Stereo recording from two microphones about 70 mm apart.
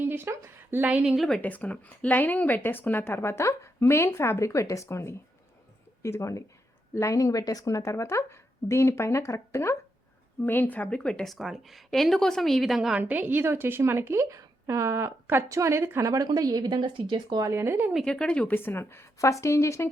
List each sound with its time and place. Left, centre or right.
0.1 s a sound: right
0.8 s a woman's voice: right
1.0 s speech: centre
1.4 s a woman's voice: left
10.4 s speech: left; by 11.3 s centre
11.3 s speech: centre
13.0 s a woman's voice: right
13.4 s speech: right
16.2 s speech: right
17.4 s speech: right
18.0 s speech: centre
18.5 s a woman's voice: left